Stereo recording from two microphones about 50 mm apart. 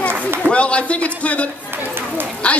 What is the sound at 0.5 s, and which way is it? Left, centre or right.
A man's voice, left.